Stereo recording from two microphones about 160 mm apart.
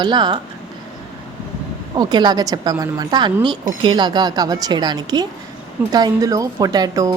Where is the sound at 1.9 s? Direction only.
25° right (ahead or behind).